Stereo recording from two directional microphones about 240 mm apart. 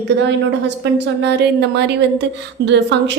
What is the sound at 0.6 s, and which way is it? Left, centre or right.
A woman's voice, right.